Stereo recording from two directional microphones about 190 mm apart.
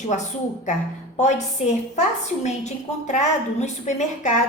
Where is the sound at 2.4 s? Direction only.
40° left (ahead or behind).